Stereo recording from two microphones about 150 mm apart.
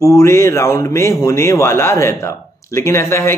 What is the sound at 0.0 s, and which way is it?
Speech, 20° left (ahead or behind).